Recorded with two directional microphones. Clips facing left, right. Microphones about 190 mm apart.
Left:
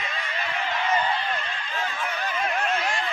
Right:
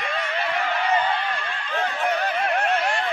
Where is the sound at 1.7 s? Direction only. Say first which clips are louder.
Right 7 dB; 60° right (ahead or behind).